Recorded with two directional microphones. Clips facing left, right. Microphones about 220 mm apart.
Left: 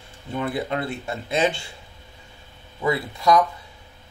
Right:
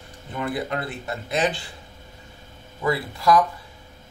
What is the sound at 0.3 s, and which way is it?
Speech, 25° left (ahead or behind).